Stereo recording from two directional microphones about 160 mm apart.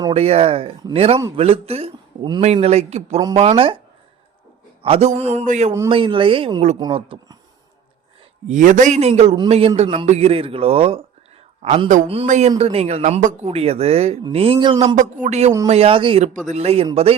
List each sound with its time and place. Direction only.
0.1 s speech: 40° right (ahead or behind)
4.8 s speech: 40° right (ahead or behind)
5.9 s speech: 30° right (ahead or behind)
8.4 s a man's voice: 50° right (ahead or behind)
12.0 s speech: 35° right (ahead or behind)
14.9 s a man's voice: 50° right (ahead or behind)